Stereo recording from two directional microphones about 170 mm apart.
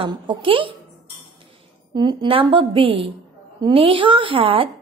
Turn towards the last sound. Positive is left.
turn(degrees=-30)  # may be behind; listen again after turning